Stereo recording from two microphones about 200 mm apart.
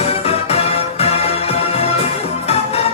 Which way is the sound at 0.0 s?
30° left (ahead or behind).